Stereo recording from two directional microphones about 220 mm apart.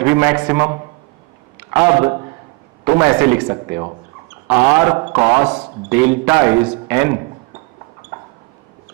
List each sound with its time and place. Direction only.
0.0 s speech: 10° right (ahead or behind)
3.5 s speech: 25° right (ahead or behind)
4.4 s speech: 10° right (ahead or behind)